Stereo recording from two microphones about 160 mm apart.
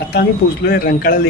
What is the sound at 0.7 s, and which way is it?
Speech, 70° left (ahead or behind).